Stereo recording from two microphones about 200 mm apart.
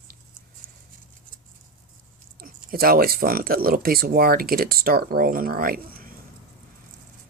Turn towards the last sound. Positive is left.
turn(degrees=-45)  # may be behind; listen again after turning